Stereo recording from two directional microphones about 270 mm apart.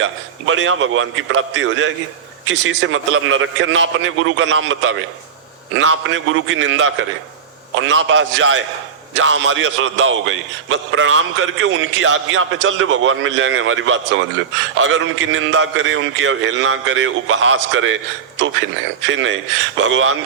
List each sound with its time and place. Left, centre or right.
0.0 s a man's voice: right
19.1 s a man's voice: right